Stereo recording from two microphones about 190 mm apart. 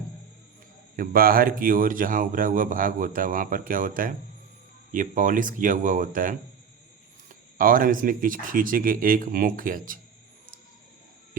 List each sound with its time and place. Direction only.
0.9 s speech: 50° right (ahead or behind)